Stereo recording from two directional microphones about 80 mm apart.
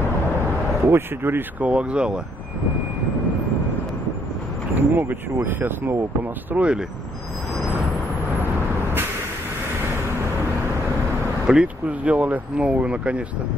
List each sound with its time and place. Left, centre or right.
0.8 s speech: right
1.7 s speech: centre
4.7 s speech: right
6.5 s speech: centre
11.4 s speech: centre